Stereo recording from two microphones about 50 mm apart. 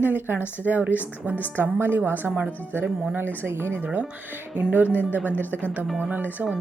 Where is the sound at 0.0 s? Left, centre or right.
Right.